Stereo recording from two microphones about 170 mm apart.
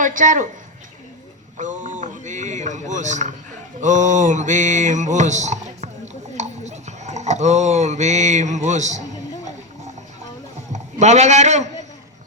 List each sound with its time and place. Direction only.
0.0 s mantra: 50° right (ahead or behind)
1.5 s speech: 45° right (ahead or behind)
3.8 s mantra: 45° right (ahead or behind)
6.3 s speech: 45° right (ahead or behind)
10.7 s a man's voice: 40° right (ahead or behind)